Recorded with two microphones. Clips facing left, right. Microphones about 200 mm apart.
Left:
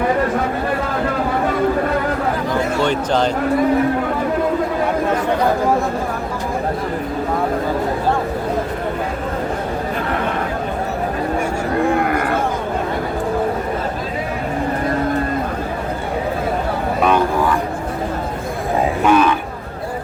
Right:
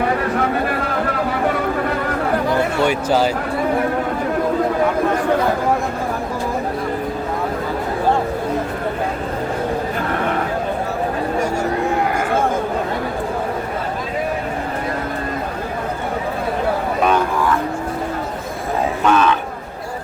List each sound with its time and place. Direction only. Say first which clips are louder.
2.8 s speech: right 1 dB; 5° right (ahead or behind)
19.0 s cattle: left 2 dB; 10° left (ahead or behind)